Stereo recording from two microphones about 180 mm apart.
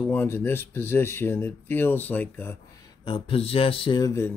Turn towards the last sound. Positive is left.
turn(degrees=15)  # may be behind; listen again after turning